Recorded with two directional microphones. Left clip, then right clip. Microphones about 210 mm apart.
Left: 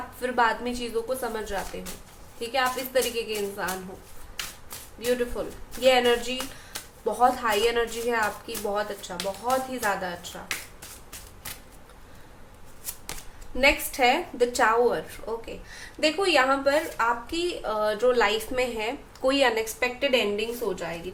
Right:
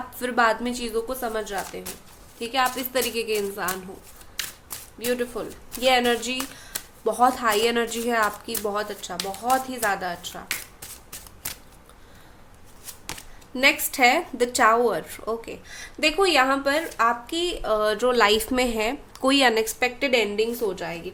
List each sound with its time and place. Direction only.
0.2 s speech: 45° right (ahead or behind)
4.9 s speech: 45° right (ahead or behind)
13.6 s speech: 45° right (ahead or behind)